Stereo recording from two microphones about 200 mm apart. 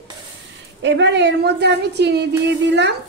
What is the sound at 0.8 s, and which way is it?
A child's voice, 60° right (ahead or behind).